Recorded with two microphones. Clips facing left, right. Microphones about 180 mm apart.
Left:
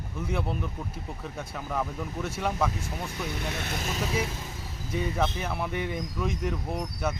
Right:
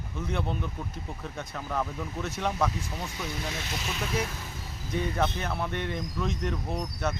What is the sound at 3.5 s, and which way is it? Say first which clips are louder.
Speech: left 2 dB; 55° left (ahead or behind).